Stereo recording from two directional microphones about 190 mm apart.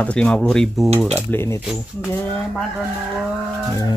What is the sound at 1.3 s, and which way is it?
Speech, 10° left (ahead or behind).